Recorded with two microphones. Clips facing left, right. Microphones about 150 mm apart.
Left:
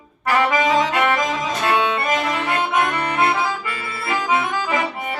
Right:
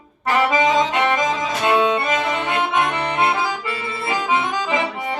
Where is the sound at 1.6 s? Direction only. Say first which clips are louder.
Right 3 dB; 20° right (ahead or behind).